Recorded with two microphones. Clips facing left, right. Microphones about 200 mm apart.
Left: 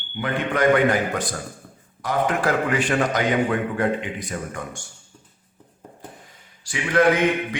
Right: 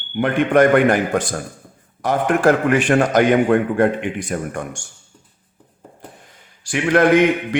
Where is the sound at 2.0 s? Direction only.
55° right (ahead or behind).